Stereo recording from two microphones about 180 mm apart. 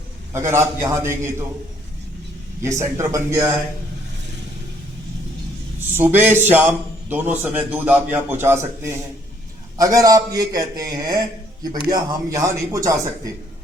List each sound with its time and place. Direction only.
0.3 s a man's voice: 15° right (ahead or behind)
2.6 s a man's voice: 15° right (ahead or behind)
5.9 s a man's voice: 10° right (ahead or behind)